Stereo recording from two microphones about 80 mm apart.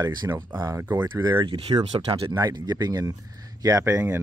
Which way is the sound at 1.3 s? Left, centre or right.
Right.